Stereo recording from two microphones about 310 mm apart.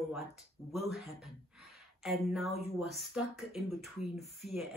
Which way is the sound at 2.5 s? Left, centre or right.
Centre.